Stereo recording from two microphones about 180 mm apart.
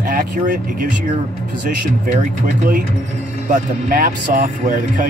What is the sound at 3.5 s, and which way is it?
Speech, 50° right (ahead or behind).